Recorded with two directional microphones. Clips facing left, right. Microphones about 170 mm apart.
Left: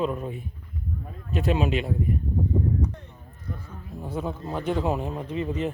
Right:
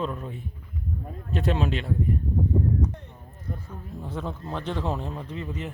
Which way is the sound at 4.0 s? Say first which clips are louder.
Left 3 dB; 10° left (ahead or behind).